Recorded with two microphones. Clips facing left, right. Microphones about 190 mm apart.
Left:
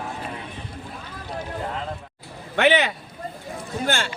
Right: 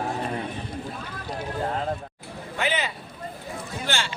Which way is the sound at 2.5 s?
70° left (ahead or behind).